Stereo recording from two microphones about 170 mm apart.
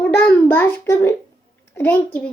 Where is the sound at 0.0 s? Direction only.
10° left (ahead or behind).